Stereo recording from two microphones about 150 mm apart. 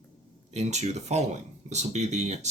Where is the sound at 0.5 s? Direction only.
50° right (ahead or behind).